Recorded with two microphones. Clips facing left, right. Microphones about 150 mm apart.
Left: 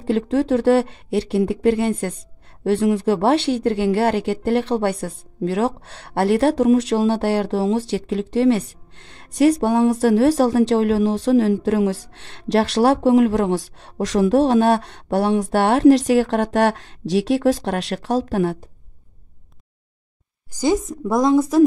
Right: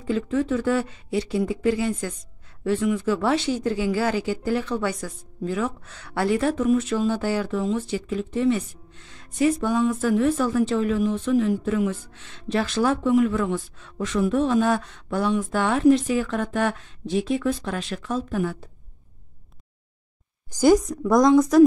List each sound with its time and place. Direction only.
0.0 s speech: 75° left (ahead or behind)
20.9 s speech: 30° left (ahead or behind)